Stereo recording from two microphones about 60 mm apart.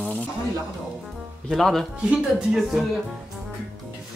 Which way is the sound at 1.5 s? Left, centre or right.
Centre.